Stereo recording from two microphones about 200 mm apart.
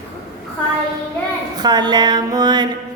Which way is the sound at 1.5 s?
20° right (ahead or behind).